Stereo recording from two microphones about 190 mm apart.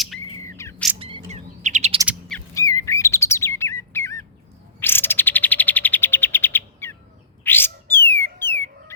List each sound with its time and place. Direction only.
0.3 s bird: 15° left (ahead or behind)
0.9 s chirp: 30° right (ahead or behind)
2.6 s bird: 15° left (ahead or behind)
4.8 s chirp: 10° left (ahead or behind)
7.4 s bird: 10° left (ahead or behind)